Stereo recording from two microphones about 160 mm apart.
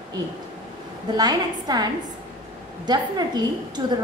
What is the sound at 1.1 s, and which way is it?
Speech, 25° right (ahead or behind).